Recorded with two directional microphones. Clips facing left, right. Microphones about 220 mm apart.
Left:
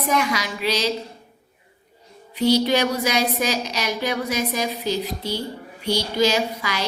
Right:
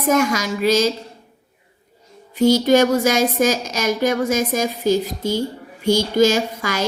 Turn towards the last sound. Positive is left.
turn(degrees=-45)  # may be behind; listen again after turning